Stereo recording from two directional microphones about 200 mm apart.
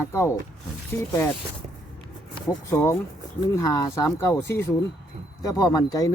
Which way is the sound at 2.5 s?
15° left (ahead or behind).